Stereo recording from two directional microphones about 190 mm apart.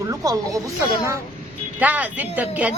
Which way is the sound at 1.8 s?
10° right (ahead or behind).